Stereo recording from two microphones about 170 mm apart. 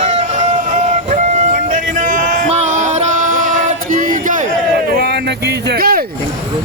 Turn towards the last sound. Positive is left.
turn(degrees=-60)  # may be behind; listen again after turning